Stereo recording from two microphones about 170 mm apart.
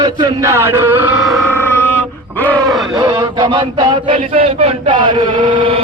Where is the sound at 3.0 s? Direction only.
25° right (ahead or behind).